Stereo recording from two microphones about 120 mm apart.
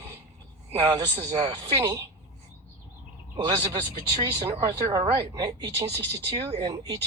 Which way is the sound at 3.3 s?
40° right (ahead or behind).